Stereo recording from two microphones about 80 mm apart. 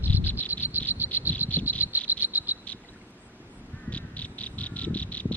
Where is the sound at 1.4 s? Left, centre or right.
Right.